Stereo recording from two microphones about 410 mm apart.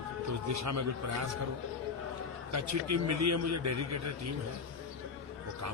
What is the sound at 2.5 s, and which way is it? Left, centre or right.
A man's voice, right.